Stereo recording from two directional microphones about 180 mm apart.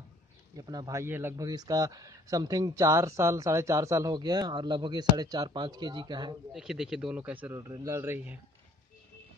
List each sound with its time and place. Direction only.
0.6 s a man's voice: 20° right (ahead or behind)
6.5 s a man's voice: centre (ahead or behind)